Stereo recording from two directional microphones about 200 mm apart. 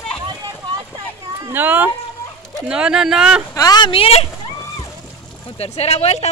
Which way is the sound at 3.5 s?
20° left (ahead or behind).